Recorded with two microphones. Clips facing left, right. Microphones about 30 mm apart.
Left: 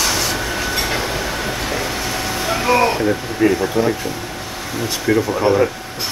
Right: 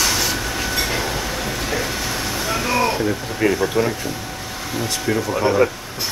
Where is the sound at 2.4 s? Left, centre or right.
Left.